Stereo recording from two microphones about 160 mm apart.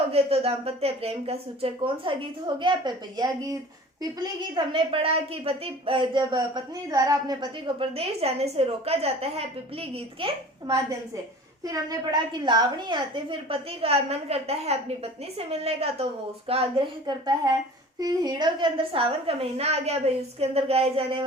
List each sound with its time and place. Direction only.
0.1 s a woman's voice: 40° right (ahead or behind)
11.6 s a woman's voice: 25° right (ahead or behind)